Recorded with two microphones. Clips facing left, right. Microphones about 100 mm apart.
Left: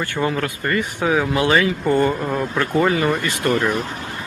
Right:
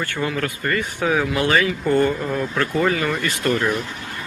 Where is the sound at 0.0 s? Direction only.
20° left (ahead or behind).